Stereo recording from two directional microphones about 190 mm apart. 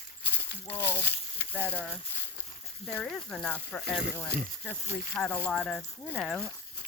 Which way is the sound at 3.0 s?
5° left (ahead or behind).